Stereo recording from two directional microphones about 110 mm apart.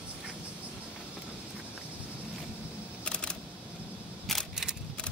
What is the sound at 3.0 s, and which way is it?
Camera, 10° left (ahead or behind).